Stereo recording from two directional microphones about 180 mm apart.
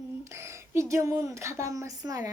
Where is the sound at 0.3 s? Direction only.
15° right (ahead or behind).